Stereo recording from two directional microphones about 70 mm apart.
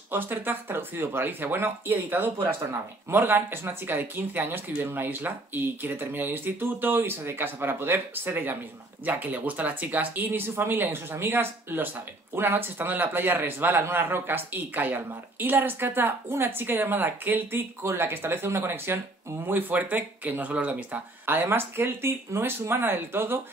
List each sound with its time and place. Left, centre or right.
0.1 s a man's voice: right